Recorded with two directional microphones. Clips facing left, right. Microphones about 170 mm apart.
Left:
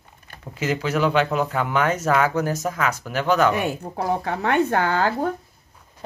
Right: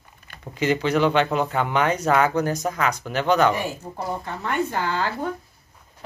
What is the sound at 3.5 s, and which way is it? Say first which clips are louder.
Speech: left 4 dB; 65° left (ahead or behind).